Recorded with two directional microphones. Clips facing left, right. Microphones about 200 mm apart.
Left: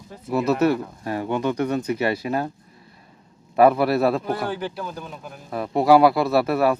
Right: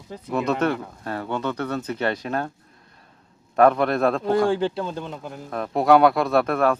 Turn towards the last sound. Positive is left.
turn(degrees=5)  # may be behind; listen again after turning